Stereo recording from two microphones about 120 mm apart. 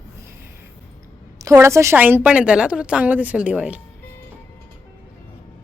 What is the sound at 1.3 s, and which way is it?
A woman's voice, 25° right (ahead or behind).